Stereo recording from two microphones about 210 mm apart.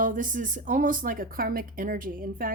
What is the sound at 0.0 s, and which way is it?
Speech, 40° right (ahead or behind).